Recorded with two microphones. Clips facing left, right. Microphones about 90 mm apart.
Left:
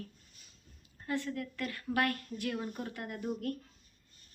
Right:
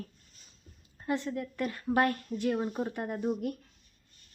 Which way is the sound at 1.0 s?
20° right (ahead or behind).